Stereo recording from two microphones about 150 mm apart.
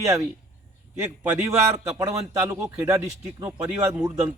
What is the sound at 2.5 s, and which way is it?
Speech, 20° right (ahead or behind).